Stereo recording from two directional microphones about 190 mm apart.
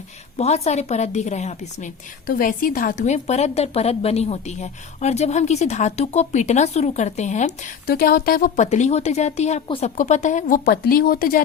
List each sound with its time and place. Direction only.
0.3 s a woman's voice: 35° left (ahead or behind); by 11.4 s 50° left (ahead or behind)